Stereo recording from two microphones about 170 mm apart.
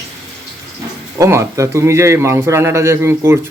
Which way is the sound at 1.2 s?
15° right (ahead or behind).